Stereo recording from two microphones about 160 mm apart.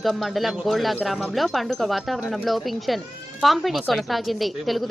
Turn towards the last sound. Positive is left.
turn(degrees=0)  # may be behind; listen again after turning